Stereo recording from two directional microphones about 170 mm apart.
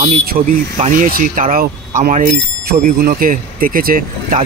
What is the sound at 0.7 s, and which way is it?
Speech, 50° right (ahead or behind).